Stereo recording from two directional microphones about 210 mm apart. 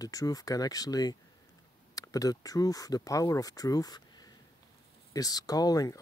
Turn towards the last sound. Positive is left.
turn(degrees=15)  # may be behind; listen again after turning